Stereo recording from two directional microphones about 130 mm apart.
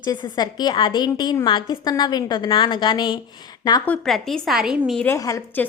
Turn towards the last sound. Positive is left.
turn(degrees=25)  # may be behind; listen again after turning